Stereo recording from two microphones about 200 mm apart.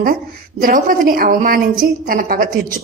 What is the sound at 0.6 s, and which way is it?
A woman's voice, 45° right (ahead or behind).